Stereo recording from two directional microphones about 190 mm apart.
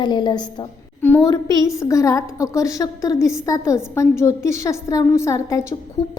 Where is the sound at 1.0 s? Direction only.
10° left (ahead or behind).